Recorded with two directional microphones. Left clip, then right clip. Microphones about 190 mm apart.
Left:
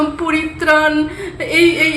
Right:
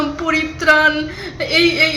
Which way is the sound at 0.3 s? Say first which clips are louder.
Right 2 dB; centre (ahead or behind).